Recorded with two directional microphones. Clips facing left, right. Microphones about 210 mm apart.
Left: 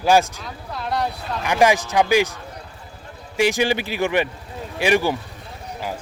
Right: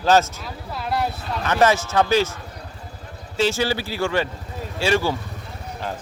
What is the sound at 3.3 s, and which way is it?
Speech, 15° left (ahead or behind).